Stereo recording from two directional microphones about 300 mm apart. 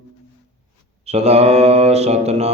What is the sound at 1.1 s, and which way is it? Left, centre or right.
Mantra, right.